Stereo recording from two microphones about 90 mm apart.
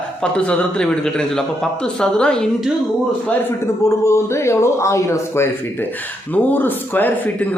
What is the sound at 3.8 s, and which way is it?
A man's voice, 35° left (ahead or behind).